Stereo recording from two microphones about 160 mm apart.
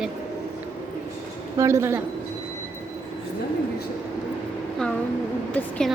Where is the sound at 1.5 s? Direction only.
20° right (ahead or behind).